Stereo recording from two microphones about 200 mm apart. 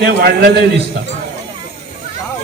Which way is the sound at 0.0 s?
55° right (ahead or behind).